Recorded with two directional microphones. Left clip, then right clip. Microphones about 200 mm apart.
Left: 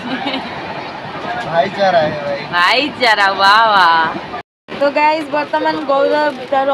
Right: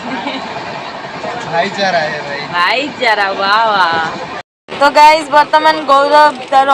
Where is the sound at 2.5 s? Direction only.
Centre (ahead or behind).